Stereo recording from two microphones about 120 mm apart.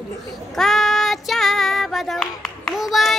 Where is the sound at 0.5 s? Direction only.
Centre (ahead or behind).